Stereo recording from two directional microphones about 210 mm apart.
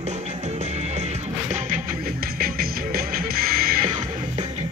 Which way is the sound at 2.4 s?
45° right (ahead or behind).